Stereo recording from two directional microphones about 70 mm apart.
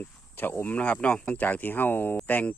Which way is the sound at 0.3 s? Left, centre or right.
Left.